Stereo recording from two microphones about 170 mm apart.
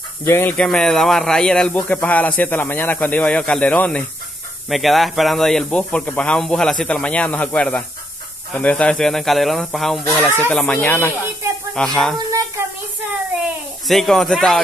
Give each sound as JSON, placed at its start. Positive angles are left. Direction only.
{"t": 0.2, "sound": "speech", "side_deg": 15}
{"t": 10.2, "sound": "speech", "side_deg": -15}
{"t": 10.5, "sound": "speech", "side_deg": 5}
{"t": 12.3, "sound": "a sound", "side_deg": -20}
{"t": 13.8, "sound": "speech", "side_deg": 0}